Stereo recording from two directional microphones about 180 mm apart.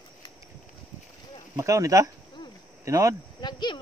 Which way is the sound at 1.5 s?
20° right (ahead or behind).